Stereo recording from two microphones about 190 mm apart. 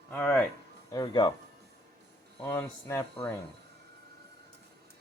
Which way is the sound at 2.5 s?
15° left (ahead or behind).